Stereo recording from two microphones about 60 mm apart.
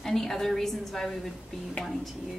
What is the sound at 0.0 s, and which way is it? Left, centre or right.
A woman's voice, centre.